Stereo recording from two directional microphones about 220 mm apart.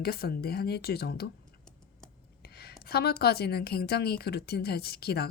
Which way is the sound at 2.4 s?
45° left (ahead or behind).